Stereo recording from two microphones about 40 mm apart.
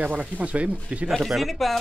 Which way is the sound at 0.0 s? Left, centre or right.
Right.